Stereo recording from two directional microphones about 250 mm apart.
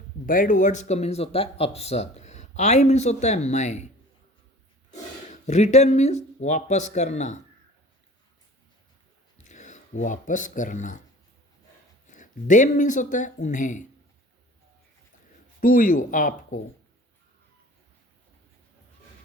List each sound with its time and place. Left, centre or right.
0.3 s speech: left
5.3 s speech: left
9.5 s speech: left
12.0 s speech: left
15.6 s speech: left